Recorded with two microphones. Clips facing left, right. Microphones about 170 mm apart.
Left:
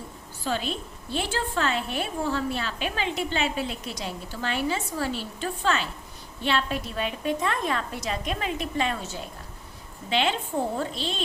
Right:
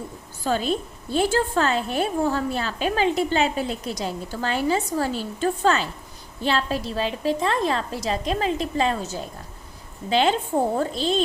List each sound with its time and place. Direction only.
0.4 s a woman's voice: 45° right (ahead or behind)